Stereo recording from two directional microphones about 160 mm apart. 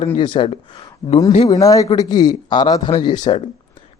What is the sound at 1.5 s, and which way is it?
Speech, 20° left (ahead or behind).